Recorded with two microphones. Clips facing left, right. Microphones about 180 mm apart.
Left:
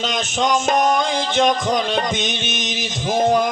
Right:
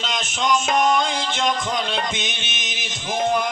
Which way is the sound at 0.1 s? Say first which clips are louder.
Left 1 dB; 45° left (ahead or behind).